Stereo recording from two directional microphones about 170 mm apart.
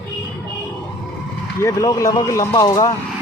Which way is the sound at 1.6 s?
20° left (ahead or behind).